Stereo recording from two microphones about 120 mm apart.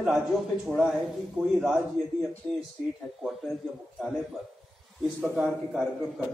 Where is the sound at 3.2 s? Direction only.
Centre (ahead or behind).